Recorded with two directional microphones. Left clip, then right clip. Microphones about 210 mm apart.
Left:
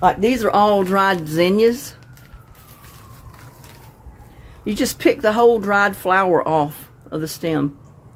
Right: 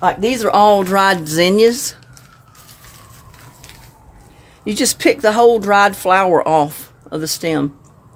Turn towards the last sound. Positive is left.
turn(degrees=-20)  # may be behind; listen again after turning